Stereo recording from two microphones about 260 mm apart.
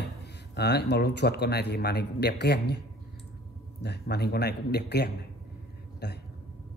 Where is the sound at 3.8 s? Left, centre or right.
Left.